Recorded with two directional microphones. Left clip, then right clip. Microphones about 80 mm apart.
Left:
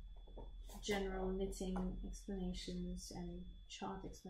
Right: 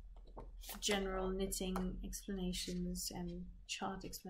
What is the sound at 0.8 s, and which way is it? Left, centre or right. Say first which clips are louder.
Speech: right 3 dB; centre.